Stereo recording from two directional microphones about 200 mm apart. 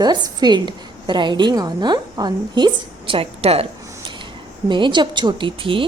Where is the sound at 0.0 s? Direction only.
20° right (ahead or behind).